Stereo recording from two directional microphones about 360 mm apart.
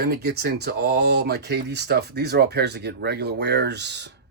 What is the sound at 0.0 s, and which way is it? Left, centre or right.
Speech, right.